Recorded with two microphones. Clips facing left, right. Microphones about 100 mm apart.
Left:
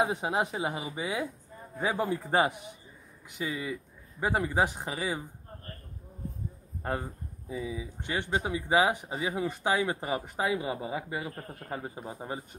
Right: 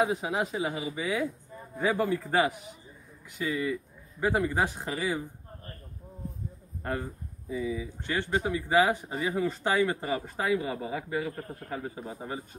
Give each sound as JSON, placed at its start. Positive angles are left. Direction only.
{"t": 0.0, "sound": "speech", "side_deg": 25}
{"t": 6.8, "sound": "speech", "side_deg": 20}